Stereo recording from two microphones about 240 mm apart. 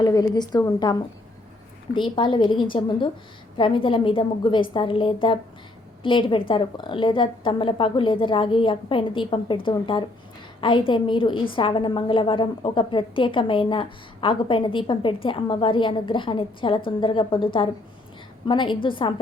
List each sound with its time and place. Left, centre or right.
0.0 s a woman's voice: centre